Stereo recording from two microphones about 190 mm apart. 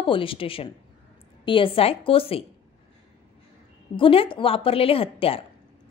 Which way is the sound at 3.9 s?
30° left (ahead or behind).